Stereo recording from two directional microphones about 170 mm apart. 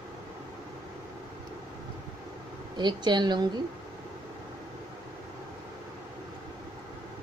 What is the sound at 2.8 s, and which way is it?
Speech, 25° right (ahead or behind).